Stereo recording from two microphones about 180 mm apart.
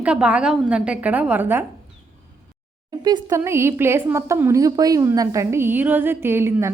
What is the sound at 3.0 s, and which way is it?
A woman's voice, 25° right (ahead or behind).